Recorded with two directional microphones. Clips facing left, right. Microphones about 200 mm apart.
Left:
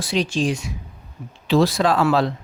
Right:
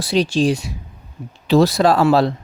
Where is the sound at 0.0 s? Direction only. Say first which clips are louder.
Right 5 dB; 35° right (ahead or behind).